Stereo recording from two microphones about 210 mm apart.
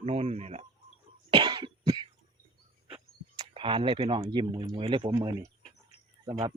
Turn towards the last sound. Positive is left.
turn(degrees=-25)  # may be behind; listen again after turning